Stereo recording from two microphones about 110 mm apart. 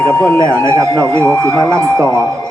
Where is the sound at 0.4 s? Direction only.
25° right (ahead or behind).